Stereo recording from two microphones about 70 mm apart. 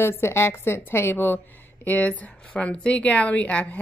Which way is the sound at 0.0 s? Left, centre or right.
Left.